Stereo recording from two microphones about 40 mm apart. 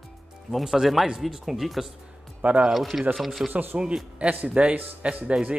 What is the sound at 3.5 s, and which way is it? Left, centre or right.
Speech, right.